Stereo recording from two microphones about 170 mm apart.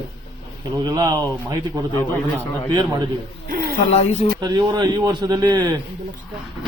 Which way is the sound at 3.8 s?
35° left (ahead or behind).